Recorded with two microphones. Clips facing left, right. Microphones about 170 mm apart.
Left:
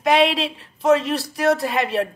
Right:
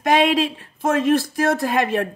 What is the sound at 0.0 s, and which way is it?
Speech, 45° right (ahead or behind).